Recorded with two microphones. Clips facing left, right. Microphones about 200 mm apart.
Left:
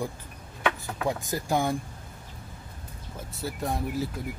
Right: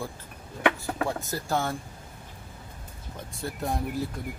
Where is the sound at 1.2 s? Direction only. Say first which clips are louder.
Left 2 dB; 15° left (ahead or behind).